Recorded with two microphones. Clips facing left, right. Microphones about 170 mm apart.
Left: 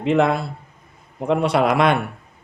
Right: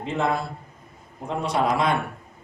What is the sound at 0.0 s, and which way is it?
Speech, 70° left (ahead or behind).